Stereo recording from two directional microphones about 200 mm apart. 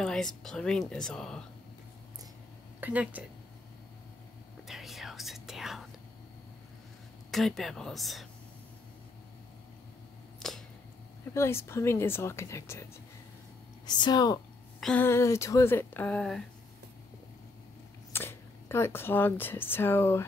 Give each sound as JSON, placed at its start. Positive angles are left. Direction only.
{"t": 0.0, "sound": "speech", "side_deg": 0}
{"t": 2.8, "sound": "speech", "side_deg": -10}
{"t": 4.6, "sound": "whispering", "side_deg": 0}
{"t": 7.2, "sound": "speech", "side_deg": 0}
{"t": 10.4, "sound": "a sound", "side_deg": 0}
{"t": 11.3, "sound": "speech", "side_deg": 15}
{"t": 13.8, "sound": "speech", "side_deg": 20}
{"t": 14.8, "sound": "speech", "side_deg": 5}
{"t": 18.1, "sound": "speech", "side_deg": 10}